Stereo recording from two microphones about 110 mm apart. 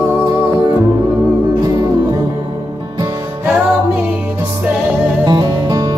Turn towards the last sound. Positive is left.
turn(degrees=-35)  # may be behind; listen again after turning